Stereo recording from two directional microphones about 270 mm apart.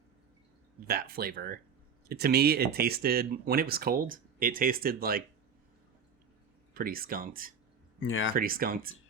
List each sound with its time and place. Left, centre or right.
0.9 s speech: right
6.7 s speech: right
7.9 s speech: left
8.4 s speech: right